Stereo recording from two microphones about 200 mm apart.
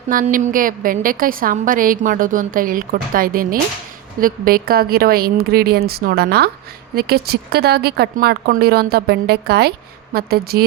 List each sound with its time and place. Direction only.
0.1 s speech: 45° right (ahead or behind)